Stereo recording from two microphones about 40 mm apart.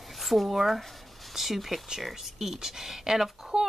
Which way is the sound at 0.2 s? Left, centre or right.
Centre.